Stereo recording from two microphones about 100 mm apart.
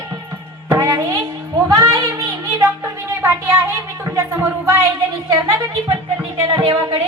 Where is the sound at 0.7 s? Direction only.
35° right (ahead or behind).